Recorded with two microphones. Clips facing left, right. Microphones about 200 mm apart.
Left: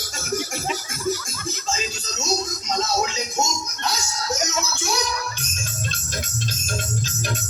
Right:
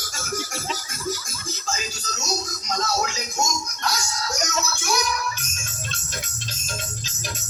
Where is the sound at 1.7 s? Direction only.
25° left (ahead or behind).